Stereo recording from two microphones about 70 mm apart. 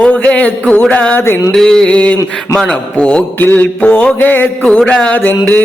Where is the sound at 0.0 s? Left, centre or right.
Centre.